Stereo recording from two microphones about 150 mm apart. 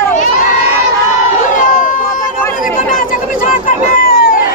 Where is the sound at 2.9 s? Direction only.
65° left (ahead or behind).